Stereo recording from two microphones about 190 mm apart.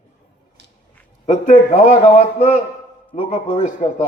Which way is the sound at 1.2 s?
40° left (ahead or behind).